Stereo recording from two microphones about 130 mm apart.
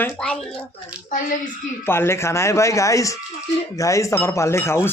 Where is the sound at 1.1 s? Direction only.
90° left.